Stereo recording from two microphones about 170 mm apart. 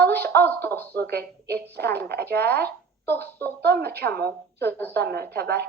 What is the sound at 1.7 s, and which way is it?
Speech, 70° right (ahead or behind).